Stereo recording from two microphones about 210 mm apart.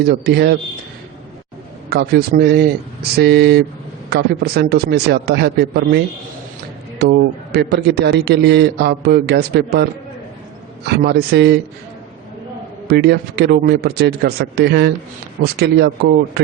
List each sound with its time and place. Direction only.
0.0 s a man's voice: 50° right (ahead or behind)
1.9 s a man's voice: 50° right (ahead or behind)
7.0 s a man's voice: 50° right (ahead or behind)
10.8 s a man's voice: 50° right (ahead or behind)
12.9 s a man's voice: 50° right (ahead or behind)